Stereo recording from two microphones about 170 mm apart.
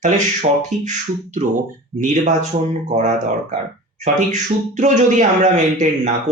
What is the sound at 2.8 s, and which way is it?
Speech, 45° right (ahead or behind).